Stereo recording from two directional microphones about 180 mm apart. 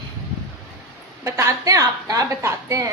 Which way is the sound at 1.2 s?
15° right (ahead or behind).